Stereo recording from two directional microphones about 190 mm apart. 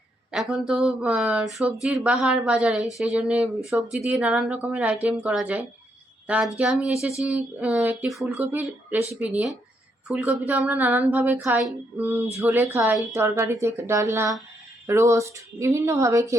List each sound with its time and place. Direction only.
0.3 s speech: centre (ahead or behind)
8.3 s speech: 15° right (ahead or behind)